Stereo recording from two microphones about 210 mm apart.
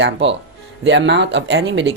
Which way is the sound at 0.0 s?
60° right (ahead or behind).